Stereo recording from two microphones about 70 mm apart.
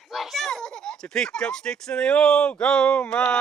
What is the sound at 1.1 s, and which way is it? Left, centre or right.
Speech, centre.